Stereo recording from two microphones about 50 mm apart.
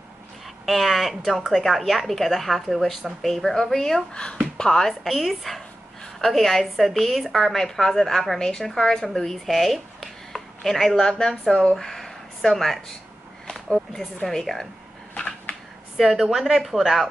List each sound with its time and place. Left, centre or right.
0.7 s a woman's voice: centre
4.1 s speech: left
5.0 s a woman's voice: centre
16.0 s a woman's voice: centre